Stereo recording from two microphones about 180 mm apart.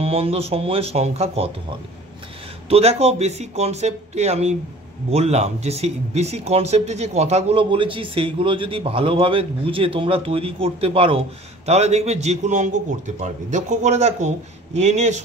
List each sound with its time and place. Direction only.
0.0 s speech: 35° right (ahead or behind)
2.7 s speech: 35° right (ahead or behind)